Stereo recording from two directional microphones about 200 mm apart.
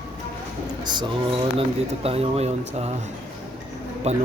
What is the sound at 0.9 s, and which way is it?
Speech, 25° right (ahead or behind).